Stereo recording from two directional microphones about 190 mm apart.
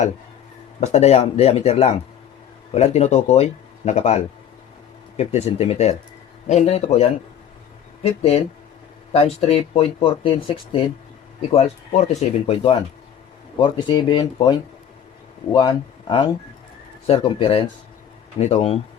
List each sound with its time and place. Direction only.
0.8 s speech: 35° left (ahead or behind)
8.2 s speech: 35° left (ahead or behind)
13.6 s speech: 25° left (ahead or behind)
15.5 s speech: 25° left (ahead or behind)